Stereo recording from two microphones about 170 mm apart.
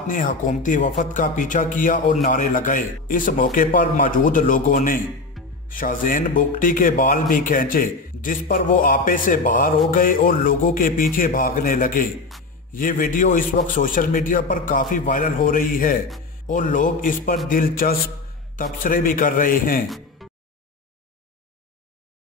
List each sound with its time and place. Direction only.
0.1 s a man's voice: 50° left (ahead or behind)
5.4 s music: centre (ahead or behind)
5.7 s a man's voice: 55° left (ahead or behind)
20.2 s a sound: centre (ahead or behind)